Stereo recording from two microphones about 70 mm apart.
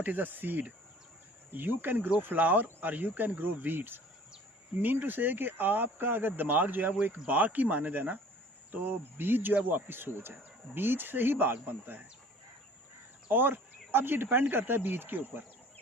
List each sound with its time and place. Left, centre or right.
0.0 s speech: right
13.3 s speech: right